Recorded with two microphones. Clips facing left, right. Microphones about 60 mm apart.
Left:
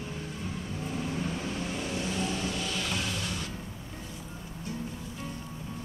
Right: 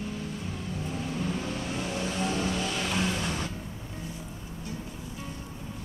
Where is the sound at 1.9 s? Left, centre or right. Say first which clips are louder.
Right 3 dB; right.